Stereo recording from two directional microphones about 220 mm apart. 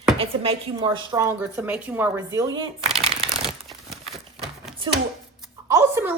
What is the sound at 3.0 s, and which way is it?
Shuffling cards, 25° right (ahead or behind).